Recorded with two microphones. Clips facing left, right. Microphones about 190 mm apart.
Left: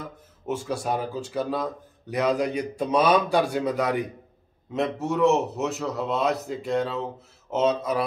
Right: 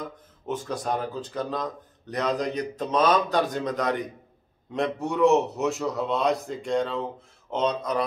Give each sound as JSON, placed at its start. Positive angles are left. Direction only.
{"t": 0.0, "sound": "a man's voice", "side_deg": 10}